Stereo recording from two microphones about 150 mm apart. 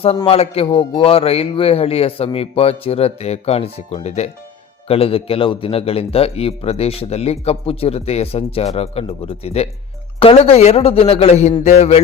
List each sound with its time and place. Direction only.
0.3 s a man's voice: 40° left (ahead or behind)